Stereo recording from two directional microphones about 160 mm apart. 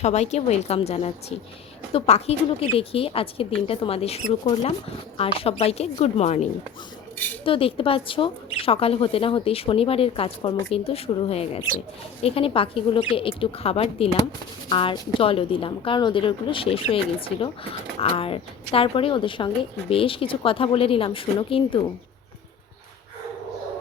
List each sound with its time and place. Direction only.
0.0 s a woman's voice: 45° left (ahead or behind)
7.4 s a woman's voice: 35° left (ahead or behind)